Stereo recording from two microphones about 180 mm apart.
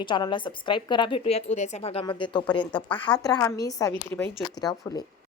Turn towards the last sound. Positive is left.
turn(degrees=20)  # may be behind; listen again after turning